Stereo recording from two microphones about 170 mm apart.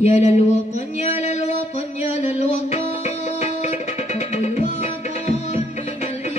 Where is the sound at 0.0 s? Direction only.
40° left (ahead or behind).